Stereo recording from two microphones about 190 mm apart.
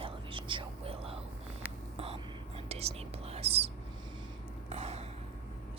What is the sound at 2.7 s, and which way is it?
Whispering, 35° right (ahead or behind).